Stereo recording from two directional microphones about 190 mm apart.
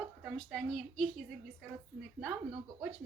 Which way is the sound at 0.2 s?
Centre (ahead or behind).